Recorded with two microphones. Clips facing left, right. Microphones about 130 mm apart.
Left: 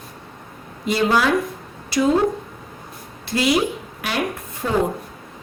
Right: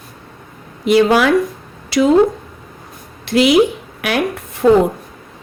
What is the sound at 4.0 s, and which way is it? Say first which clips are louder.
Speech: right 6 dB; 75° right (ahead or behind).